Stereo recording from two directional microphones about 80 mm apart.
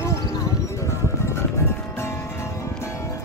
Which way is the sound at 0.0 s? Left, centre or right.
Left.